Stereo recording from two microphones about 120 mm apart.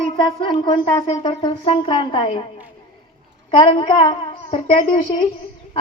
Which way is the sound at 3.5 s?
40° left (ahead or behind).